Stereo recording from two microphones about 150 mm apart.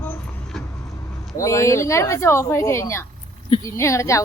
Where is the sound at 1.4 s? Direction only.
20° left (ahead or behind).